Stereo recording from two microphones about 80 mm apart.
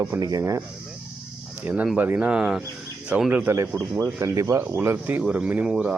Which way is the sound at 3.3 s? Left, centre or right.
Right.